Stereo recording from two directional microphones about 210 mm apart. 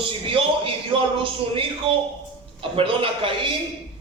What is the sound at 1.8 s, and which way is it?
A man's voice, 25° right (ahead or behind).